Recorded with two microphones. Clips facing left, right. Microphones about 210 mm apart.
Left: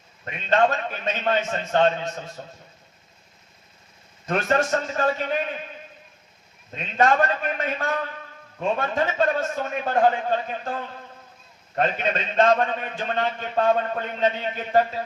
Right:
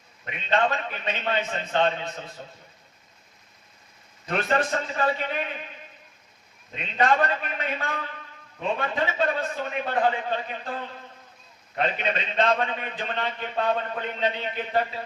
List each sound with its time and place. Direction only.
0.5 s a man's voice: 45° left (ahead or behind)
4.3 s a man's voice: 45° left (ahead or behind)
6.7 s a man's voice: 45° left (ahead or behind)
11.8 s a man's voice: 45° left (ahead or behind)